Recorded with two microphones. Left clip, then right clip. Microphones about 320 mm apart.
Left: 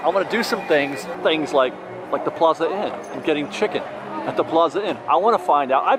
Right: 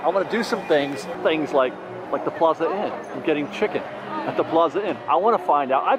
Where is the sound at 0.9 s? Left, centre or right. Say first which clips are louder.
Left 2 dB; centre.